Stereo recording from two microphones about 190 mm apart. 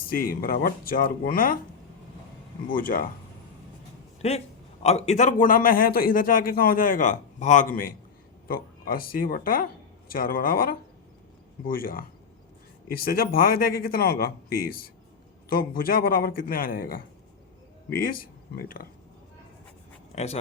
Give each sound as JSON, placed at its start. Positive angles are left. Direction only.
{"t": 0.1, "sound": "a man's voice", "side_deg": 50}
{"t": 2.7, "sound": "a man's voice", "side_deg": 50}
{"t": 4.2, "sound": "a man's voice", "side_deg": 35}
{"t": 18.5, "sound": "a man's voice", "side_deg": 50}
{"t": 20.1, "sound": "speech", "side_deg": 35}